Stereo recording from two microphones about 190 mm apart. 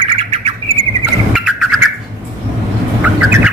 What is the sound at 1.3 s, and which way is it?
Vehicle, centre (ahead or behind).